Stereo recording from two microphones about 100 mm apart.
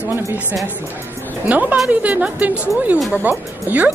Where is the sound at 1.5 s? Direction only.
15° right (ahead or behind).